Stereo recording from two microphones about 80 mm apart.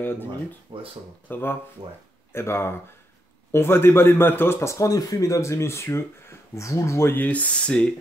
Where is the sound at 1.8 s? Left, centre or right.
Right.